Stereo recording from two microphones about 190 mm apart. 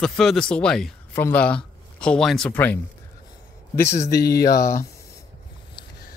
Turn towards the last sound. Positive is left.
turn(degrees=15)  # may be behind; listen again after turning